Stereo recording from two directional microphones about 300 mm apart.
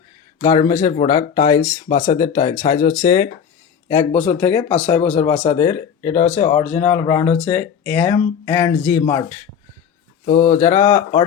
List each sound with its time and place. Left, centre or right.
0.4 s speech: centre
5.6 s speech: left
6.2 s speech: centre
10.2 s speech: left